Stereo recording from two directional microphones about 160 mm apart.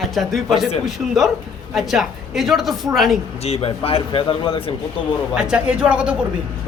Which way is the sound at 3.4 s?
40° left (ahead or behind).